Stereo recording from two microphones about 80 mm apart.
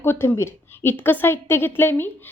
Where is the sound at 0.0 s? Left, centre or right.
Left.